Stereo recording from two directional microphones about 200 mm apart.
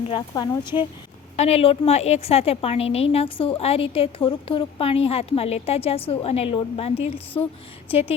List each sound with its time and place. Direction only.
0.1 s a woman's voice: 20° left (ahead or behind)